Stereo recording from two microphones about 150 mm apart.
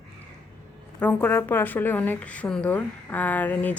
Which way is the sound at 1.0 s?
15° left (ahead or behind).